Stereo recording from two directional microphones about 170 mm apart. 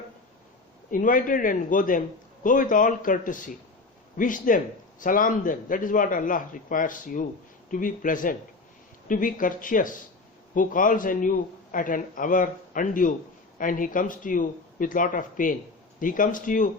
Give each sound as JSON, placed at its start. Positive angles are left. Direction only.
{"t": 0.9, "sound": "a man's voice", "side_deg": 50}